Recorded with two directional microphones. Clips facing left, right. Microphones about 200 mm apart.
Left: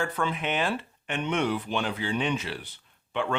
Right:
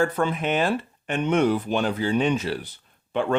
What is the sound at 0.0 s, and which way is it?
Speech, 40° right (ahead or behind).